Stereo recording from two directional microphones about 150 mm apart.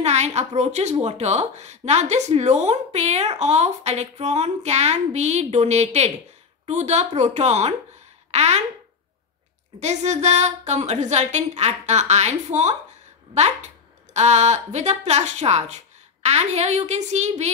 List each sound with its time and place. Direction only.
0.0 s a woman's voice: 50° right (ahead or behind)
9.8 s a woman's voice: 50° right (ahead or behind)